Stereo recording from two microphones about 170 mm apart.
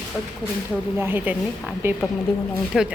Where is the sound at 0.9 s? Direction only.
10° right (ahead or behind).